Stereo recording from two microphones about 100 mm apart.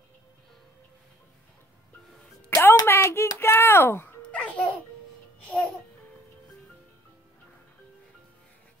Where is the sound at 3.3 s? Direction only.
25° left (ahead or behind).